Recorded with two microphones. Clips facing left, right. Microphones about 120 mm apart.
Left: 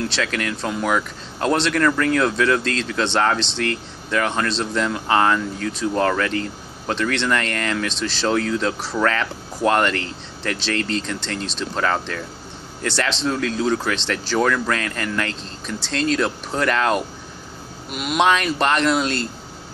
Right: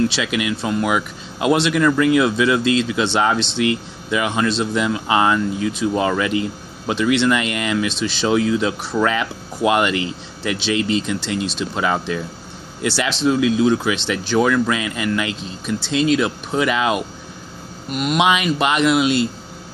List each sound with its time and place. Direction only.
0.1 s speech: 10° right (ahead or behind)